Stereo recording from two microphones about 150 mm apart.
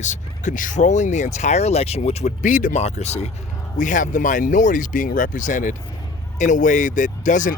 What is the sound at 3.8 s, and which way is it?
Speech, 60° left (ahead or behind).